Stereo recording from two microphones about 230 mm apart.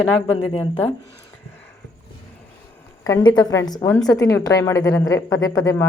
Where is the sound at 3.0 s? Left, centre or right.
Centre.